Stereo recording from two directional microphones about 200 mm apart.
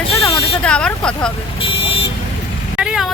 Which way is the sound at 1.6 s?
25° left (ahead or behind).